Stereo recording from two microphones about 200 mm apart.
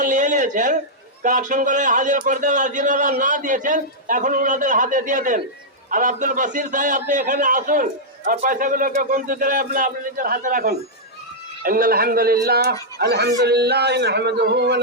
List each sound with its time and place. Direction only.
0.0 s a man's voice: 40° right (ahead or behind); by 14.8 s 60° right (ahead or behind)